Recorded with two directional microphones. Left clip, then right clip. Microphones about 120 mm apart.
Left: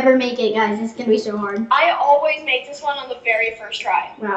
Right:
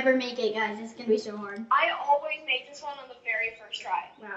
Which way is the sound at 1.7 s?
30° left (ahead or behind).